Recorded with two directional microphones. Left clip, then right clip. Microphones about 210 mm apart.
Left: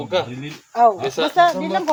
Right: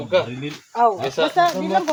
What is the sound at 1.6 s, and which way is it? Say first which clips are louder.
Speech: right 2 dB; 30° left (ahead or behind).